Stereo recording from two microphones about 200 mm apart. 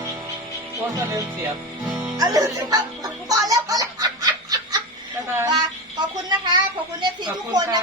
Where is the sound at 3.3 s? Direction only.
15° right (ahead or behind).